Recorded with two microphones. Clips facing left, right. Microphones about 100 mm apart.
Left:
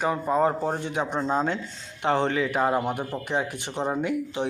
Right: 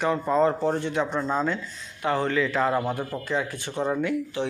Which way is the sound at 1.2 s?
30° left (ahead or behind).